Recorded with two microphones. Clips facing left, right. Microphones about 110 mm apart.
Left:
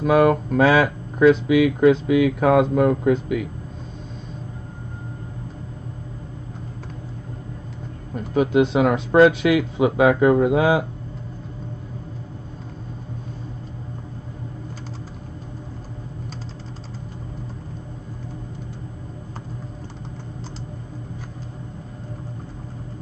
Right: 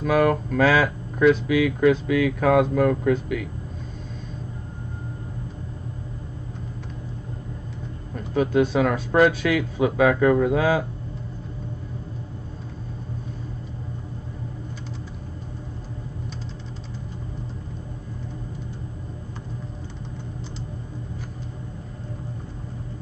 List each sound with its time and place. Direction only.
0.0 s speech: 25° left (ahead or behind)
8.4 s speech: 20° left (ahead or behind)